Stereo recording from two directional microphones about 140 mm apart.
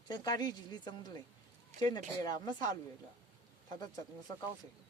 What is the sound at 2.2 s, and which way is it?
Speech, 30° left (ahead or behind).